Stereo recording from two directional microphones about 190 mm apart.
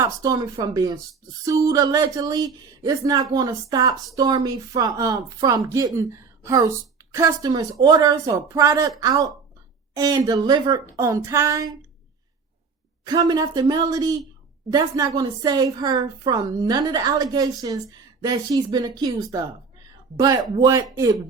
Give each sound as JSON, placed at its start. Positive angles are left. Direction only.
{"t": 0.0, "sound": "a woman's voice", "side_deg": -20}
{"t": 13.1, "sound": "a woman's voice", "side_deg": -20}